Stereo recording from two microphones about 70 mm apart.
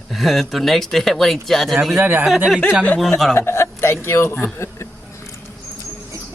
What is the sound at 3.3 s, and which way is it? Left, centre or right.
Speech, left.